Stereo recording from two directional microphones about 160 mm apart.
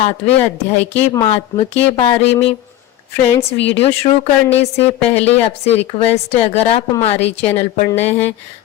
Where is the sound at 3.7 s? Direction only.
40° left (ahead or behind).